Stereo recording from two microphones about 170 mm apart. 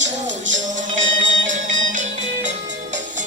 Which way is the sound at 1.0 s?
90° right.